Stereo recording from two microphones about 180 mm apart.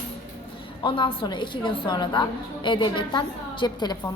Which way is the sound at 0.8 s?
30° left (ahead or behind).